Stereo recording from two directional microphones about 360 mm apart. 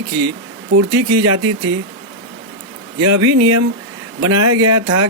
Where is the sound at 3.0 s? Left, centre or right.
Right.